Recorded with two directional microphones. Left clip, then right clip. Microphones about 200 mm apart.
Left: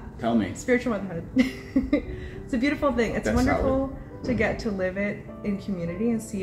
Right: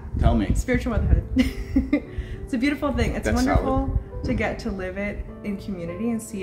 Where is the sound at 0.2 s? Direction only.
20° right (ahead or behind).